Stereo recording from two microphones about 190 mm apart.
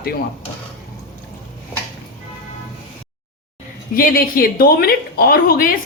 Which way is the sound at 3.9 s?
50° left (ahead or behind).